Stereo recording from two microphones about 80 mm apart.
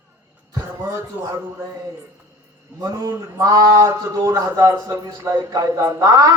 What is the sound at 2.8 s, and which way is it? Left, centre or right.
A man's voice, right.